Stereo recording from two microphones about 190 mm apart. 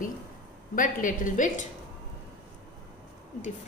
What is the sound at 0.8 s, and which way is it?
Speech, 45° left (ahead or behind).